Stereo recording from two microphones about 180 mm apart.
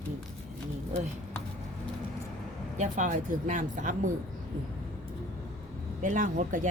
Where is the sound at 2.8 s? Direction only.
45° right (ahead or behind).